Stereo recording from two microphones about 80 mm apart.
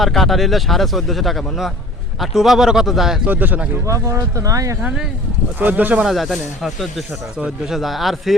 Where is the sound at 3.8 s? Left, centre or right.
Right.